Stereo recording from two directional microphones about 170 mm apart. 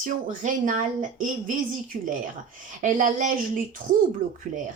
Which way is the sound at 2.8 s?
50° right (ahead or behind).